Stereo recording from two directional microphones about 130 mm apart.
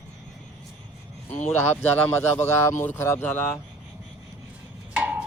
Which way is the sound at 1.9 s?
15° left (ahead or behind).